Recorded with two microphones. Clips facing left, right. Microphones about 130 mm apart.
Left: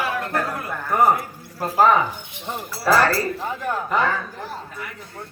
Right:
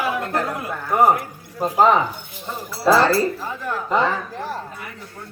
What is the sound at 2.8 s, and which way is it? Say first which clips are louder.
Speech: right 3 dB; 20° right (ahead or behind).